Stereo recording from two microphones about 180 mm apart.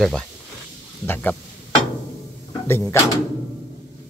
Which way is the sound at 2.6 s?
15° left (ahead or behind).